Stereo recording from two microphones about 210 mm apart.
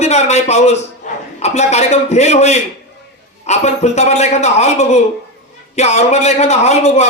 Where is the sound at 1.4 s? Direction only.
30° left (ahead or behind).